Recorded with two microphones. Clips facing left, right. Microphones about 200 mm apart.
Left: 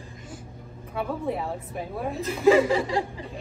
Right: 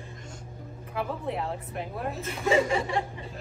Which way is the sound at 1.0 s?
Centre (ahead or behind).